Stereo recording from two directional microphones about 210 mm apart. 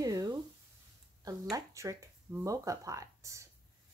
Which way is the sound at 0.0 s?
15° right (ahead or behind).